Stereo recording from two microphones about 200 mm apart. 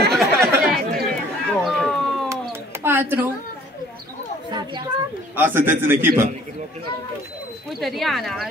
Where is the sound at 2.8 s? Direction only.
10° right (ahead or behind).